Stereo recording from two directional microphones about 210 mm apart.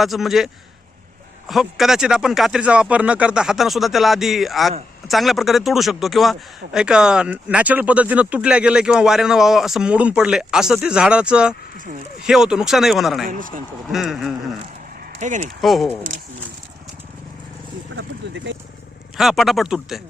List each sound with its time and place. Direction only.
0.0 s speech: centre (ahead or behind)
13.2 s speech: 40° right (ahead or behind)
13.9 s speech: centre (ahead or behind)
15.2 s speech: 35° right (ahead or behind)
15.6 s speech: centre (ahead or behind)
17.9 s a sound: 50° right (ahead or behind)
19.1 s speech: centre (ahead or behind)